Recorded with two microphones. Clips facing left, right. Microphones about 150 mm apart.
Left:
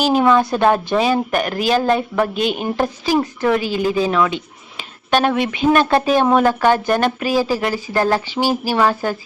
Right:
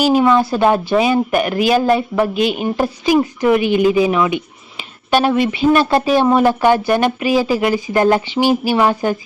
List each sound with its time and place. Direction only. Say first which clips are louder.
0.0 s speech: right 2 dB; 5° right (ahead or behind)
5.4 s speech: right 4 dB; 55° left (ahead or behind)
5.7 s speech: left 1 dB; 5° right (ahead or behind)
8.4 s speech: right 4 dB; 40° left (ahead or behind)
8.7 s speech: right 2 dB; 15° right (ahead or behind)